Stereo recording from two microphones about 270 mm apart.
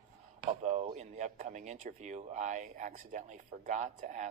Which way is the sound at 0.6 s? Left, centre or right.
Right.